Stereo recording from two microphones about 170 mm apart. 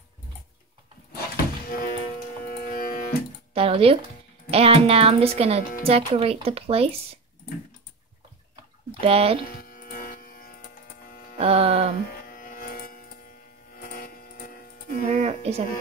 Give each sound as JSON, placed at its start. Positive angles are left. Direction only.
{"t": 1.1, "sound": "thunk", "side_deg": 60}
{"t": 2.4, "sound": "civil defense siren", "side_deg": 55}
{"t": 3.5, "sound": "speech", "side_deg": -35}
{"t": 9.0, "sound": "speech", "side_deg": -35}
{"t": 9.5, "sound": "a sound", "side_deg": 60}
{"t": 11.3, "sound": "hum", "side_deg": -35}
{"t": 12.2, "sound": "a sound", "side_deg": 55}
{"t": 15.0, "sound": "a woman's voice", "side_deg": -40}